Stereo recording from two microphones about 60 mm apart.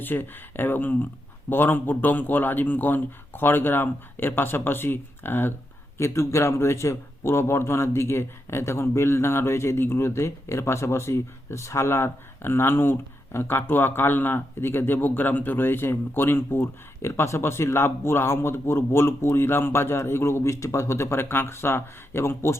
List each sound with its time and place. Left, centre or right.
0.0 s a man's voice: left
6.0 s a man's voice: left